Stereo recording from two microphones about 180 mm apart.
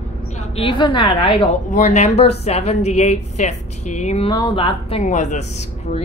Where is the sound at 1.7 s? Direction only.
40° left (ahead or behind).